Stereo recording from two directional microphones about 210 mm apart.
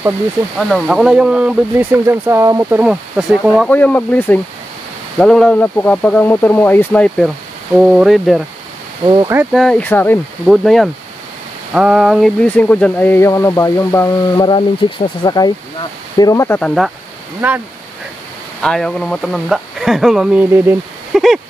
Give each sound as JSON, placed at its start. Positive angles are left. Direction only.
{"t": 0.6, "sound": "speech", "side_deg": 0}
{"t": 9.0, "sound": "speech", "side_deg": -20}
{"t": 9.3, "sound": "speech", "side_deg": -5}
{"t": 17.4, "sound": "speech", "side_deg": -10}
{"t": 18.6, "sound": "speech", "side_deg": 5}